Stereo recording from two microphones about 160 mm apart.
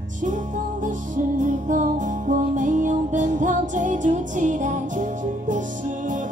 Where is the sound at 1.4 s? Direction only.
55° right (ahead or behind).